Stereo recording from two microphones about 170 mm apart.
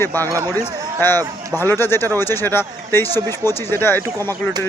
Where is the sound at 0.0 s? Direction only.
10° left (ahead or behind).